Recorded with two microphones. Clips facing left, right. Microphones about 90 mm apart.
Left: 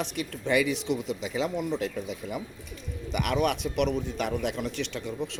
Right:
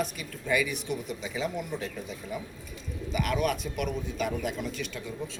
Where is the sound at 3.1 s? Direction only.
70° left (ahead or behind).